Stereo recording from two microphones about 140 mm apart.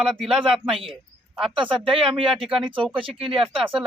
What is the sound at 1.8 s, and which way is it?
Speech, 40° right (ahead or behind).